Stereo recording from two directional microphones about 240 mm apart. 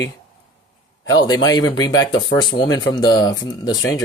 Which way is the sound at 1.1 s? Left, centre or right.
Centre.